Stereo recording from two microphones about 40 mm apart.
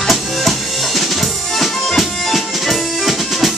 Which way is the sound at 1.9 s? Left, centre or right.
Centre.